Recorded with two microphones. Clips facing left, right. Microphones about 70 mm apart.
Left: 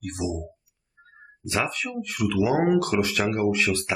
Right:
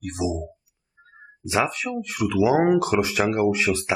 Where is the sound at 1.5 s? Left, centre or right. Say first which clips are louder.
Right 4 dB; centre.